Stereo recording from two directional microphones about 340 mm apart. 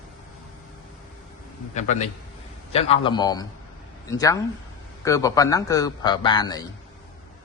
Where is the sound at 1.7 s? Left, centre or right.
Left.